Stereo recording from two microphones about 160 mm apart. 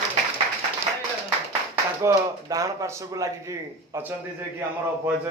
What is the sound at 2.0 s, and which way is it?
A man's voice, 20° right (ahead or behind).